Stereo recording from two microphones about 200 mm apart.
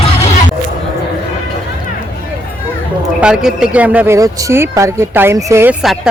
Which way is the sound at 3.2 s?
5° right (ahead or behind).